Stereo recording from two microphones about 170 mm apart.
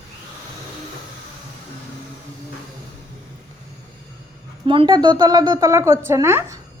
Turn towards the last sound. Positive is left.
turn(degrees=-15)  # may be behind; listen again after turning